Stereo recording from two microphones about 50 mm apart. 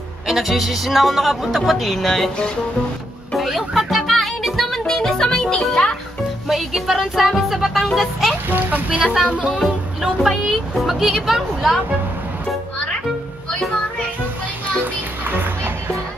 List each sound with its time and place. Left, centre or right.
0.3 s speech: centre
3.3 s speech: centre
6.4 s speech: centre
8.5 s a child's voice: right
8.9 s speech: centre
15.2 s music: right